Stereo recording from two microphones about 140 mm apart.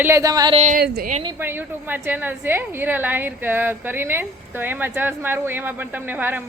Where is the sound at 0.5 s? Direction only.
70° right (ahead or behind); by 1.1 s 90° right.